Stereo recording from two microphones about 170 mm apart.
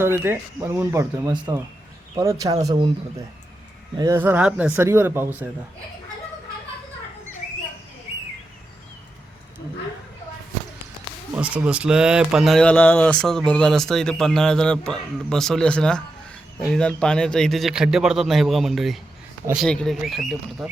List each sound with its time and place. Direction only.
0.0 s speech: 15° right (ahead or behind)
3.9 s speech: 20° right (ahead or behind)
4.2 s speech: 10° right (ahead or behind)
11.3 s speech: 5° right (ahead or behind)